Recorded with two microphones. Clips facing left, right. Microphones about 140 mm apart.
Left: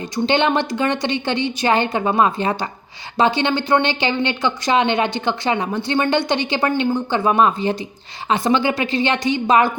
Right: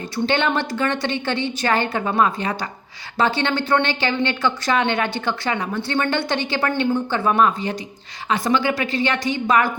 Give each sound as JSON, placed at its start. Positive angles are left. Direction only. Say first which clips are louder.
{"t": 0.3, "sound": "speech", "louder": "left 3 dB", "side_deg": 20}